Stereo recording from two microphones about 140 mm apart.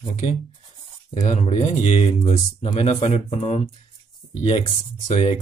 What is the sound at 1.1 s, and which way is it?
Speech, 55° left (ahead or behind).